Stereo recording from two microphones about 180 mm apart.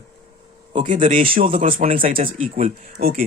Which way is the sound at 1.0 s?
50° right (ahead or behind).